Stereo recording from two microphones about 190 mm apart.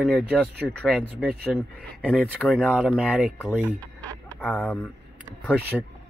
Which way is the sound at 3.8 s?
10° left (ahead or behind).